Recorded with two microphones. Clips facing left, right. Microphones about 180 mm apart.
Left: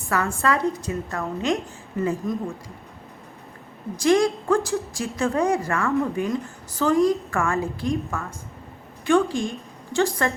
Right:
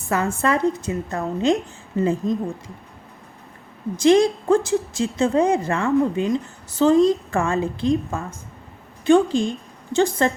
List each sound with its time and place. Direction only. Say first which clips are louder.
0.1 s a woman's voice: right 2 dB; 20° right (ahead or behind)
3.9 s a woman's voice: right 4 dB; 25° right (ahead or behind)